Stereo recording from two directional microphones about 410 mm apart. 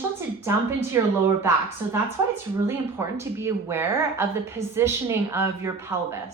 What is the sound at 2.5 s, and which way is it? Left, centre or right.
Speech, centre.